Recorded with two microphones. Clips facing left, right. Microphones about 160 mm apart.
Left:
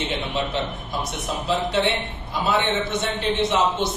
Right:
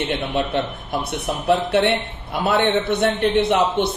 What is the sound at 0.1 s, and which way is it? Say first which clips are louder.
A man's voice: right 4 dB; 55° right (ahead or behind).